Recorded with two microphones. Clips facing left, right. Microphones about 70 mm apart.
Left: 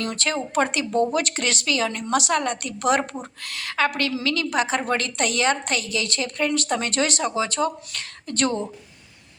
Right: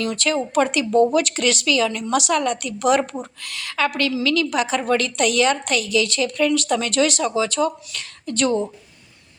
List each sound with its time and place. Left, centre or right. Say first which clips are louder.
0.0 s a woman's voice: right 4 dB; left